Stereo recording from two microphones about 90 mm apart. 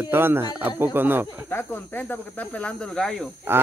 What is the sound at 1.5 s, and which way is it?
Speech, 20° left (ahead or behind).